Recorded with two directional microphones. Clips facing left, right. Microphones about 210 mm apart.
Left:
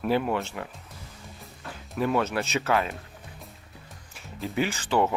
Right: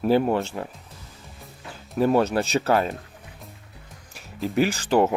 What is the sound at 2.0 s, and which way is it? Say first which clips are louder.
Speech: right 6 dB; 35° right (ahead or behind).